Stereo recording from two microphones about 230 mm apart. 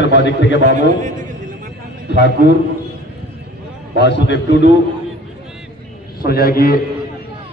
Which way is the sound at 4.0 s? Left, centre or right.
Left.